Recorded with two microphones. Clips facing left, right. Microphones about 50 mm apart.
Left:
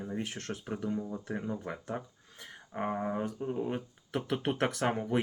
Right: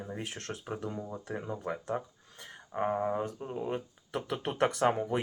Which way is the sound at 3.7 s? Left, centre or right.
Centre.